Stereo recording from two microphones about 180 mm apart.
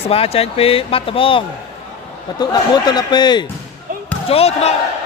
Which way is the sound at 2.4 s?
25° left (ahead or behind).